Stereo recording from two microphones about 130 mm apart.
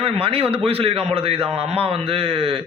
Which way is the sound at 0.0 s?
45° right (ahead or behind).